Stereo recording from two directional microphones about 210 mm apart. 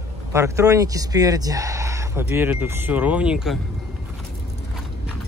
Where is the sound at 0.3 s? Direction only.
15° right (ahead or behind).